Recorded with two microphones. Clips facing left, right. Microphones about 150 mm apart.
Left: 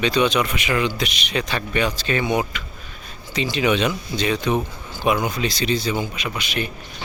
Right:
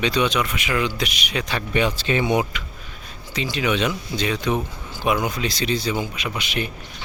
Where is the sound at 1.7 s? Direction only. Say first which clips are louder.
Right 3 dB; 20° right (ahead or behind).